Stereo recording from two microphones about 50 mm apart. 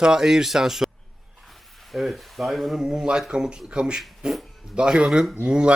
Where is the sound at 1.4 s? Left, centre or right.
Centre.